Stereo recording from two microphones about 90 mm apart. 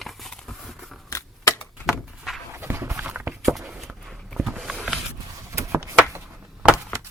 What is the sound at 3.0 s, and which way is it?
Walk, 20° right (ahead or behind).